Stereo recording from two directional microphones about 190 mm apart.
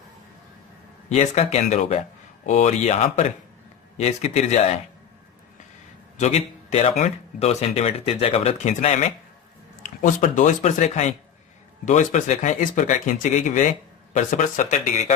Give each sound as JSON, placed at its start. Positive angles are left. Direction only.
{"t": 1.1, "sound": "speech", "side_deg": 35}
{"t": 6.1, "sound": "speech", "side_deg": 35}